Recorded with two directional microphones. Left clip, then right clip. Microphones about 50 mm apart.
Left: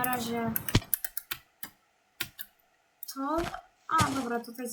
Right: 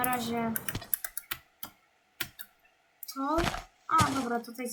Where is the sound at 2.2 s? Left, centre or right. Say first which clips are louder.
Even; centre.